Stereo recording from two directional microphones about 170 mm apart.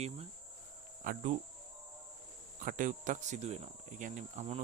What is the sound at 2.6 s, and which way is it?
Speech, 50° right (ahead or behind).